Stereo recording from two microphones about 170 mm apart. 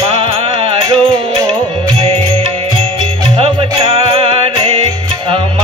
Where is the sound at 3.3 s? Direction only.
35° right (ahead or behind).